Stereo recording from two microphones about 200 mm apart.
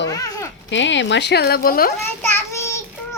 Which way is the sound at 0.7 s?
65° left (ahead or behind).